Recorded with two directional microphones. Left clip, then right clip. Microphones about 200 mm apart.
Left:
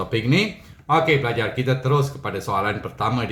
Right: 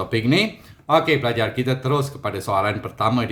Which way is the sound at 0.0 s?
40° right (ahead or behind).